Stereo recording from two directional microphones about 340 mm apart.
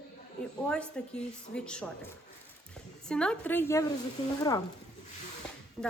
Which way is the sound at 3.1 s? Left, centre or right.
Centre.